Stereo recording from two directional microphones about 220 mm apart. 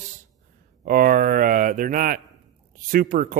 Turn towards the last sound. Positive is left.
turn(degrees=-40)  # may be behind; listen again after turning